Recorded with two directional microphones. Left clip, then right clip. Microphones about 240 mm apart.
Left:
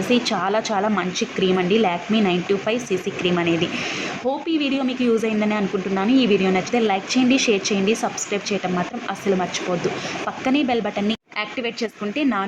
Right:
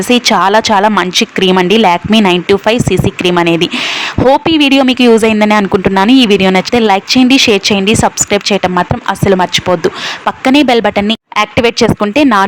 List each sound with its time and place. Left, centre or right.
0.1 s speech: right